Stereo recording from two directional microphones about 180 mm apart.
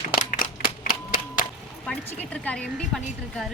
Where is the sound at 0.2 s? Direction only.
45° left (ahead or behind).